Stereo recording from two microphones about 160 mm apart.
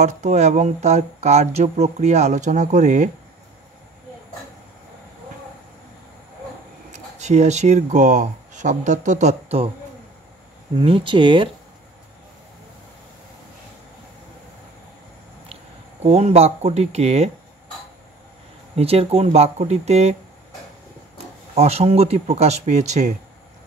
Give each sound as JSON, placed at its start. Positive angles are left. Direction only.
{"t": 0.0, "sound": "speech", "side_deg": -45}
{"t": 6.9, "sound": "speech", "side_deg": -45}
{"t": 10.8, "sound": "speech", "side_deg": -35}
{"t": 15.4, "sound": "speech", "side_deg": -40}
{"t": 18.8, "sound": "speech", "side_deg": -40}
{"t": 21.5, "sound": "speech", "side_deg": -40}